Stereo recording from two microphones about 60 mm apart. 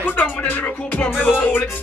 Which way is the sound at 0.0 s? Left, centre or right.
Left.